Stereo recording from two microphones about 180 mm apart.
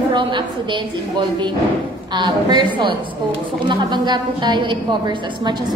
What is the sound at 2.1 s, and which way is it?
A woman's voice, 25° right (ahead or behind).